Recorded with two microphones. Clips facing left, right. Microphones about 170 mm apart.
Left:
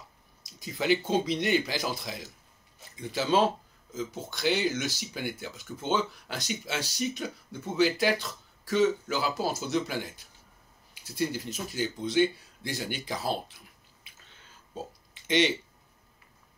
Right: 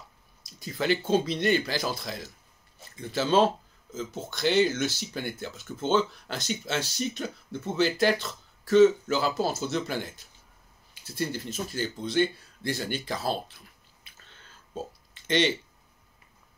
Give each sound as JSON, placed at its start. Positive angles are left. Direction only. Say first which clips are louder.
{"t": 0.6, "sound": "speech", "louder": "even", "side_deg": 15}
{"t": 15.2, "sound": "speech", "louder": "even", "side_deg": 15}